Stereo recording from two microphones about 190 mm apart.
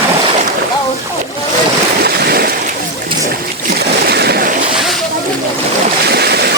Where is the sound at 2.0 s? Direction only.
55° right (ahead or behind).